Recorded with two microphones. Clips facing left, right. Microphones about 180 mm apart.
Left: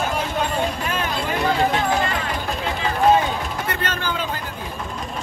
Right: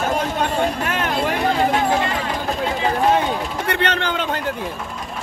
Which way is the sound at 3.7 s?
70° right (ahead or behind).